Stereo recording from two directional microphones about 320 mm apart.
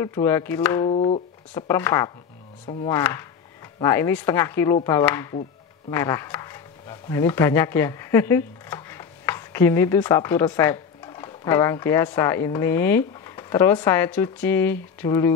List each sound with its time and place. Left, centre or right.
0.0 s speech: centre
0.9 s speech: centre
1.5 s speech: centre
2.6 s speech: left
2.9 s speech: centre